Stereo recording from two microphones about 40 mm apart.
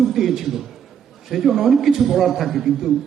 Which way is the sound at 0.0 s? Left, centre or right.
Centre.